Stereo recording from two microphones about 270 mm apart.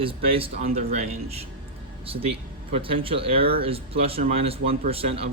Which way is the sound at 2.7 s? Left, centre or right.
Centre.